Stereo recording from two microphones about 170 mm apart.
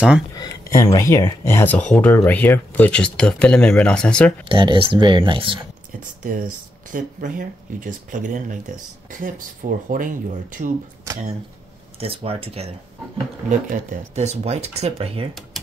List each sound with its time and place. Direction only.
0.4 s speech: 20° left (ahead or behind); by 4.3 s 5° left (ahead or behind)
4.5 s speech: 30° right (ahead or behind)
6.2 s speech: 50° right (ahead or behind)
12.0 s speech: 35° right (ahead or behind)
13.5 s speech: 50° right (ahead or behind)